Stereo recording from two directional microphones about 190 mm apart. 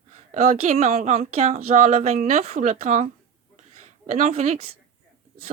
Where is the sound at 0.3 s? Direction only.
35° right (ahead or behind).